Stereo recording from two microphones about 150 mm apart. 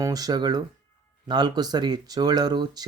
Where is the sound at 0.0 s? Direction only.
25° right (ahead or behind).